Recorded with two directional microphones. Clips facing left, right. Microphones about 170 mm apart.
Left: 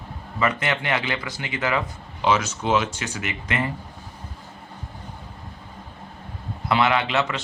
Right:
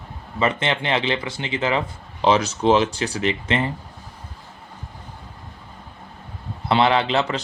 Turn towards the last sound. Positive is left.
turn(degrees=-35)  # may be behind; listen again after turning